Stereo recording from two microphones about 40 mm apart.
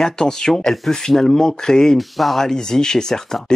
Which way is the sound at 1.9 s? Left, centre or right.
Centre.